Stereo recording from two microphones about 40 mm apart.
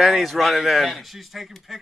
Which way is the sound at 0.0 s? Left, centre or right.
Centre.